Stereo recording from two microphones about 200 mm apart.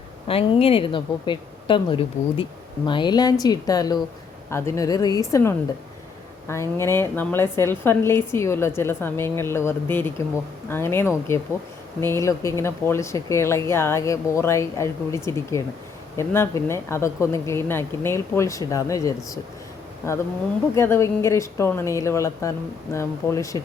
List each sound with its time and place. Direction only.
0.3 s a woman's voice: 30° left (ahead or behind)
20.7 s a woman's voice: 10° left (ahead or behind)